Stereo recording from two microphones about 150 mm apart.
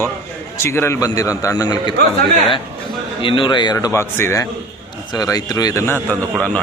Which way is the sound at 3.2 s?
35° left (ahead or behind).